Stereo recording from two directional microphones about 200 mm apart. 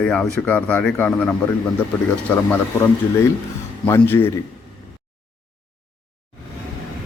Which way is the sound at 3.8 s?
10° left (ahead or behind).